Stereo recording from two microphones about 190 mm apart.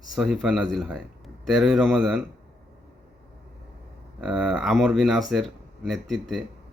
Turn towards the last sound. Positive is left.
turn(degrees=0)  # may be behind; listen again after turning